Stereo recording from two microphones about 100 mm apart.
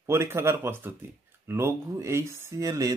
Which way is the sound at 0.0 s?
25° right (ahead or behind).